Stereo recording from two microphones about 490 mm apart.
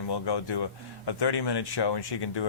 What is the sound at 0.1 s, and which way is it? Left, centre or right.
Speech, left.